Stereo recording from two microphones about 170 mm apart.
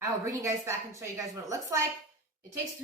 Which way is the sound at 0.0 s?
20° right (ahead or behind).